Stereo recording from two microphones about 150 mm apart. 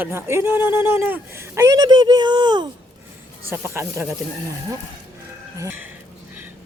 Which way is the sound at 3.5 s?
15° right (ahead or behind).